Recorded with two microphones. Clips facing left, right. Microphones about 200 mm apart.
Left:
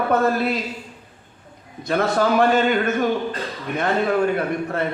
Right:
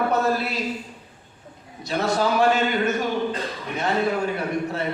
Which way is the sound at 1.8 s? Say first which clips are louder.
Left 3 dB; 55° left (ahead or behind).